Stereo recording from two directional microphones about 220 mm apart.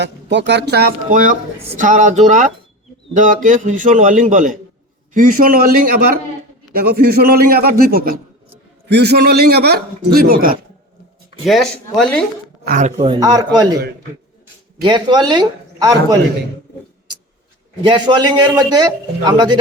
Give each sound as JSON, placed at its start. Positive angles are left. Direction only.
{"t": 0.0, "sound": "a man's voice", "side_deg": -50}
{"t": 11.4, "sound": "speech", "side_deg": 0}
{"t": 12.6, "sound": "a man's voice", "side_deg": -35}
{"t": 13.1, "sound": "speech", "side_deg": -15}
{"t": 14.8, "sound": "a man's voice", "side_deg": -20}
{"t": 17.8, "sound": "a man's voice", "side_deg": -20}